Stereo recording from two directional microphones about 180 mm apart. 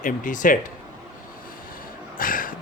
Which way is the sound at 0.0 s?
45° left (ahead or behind).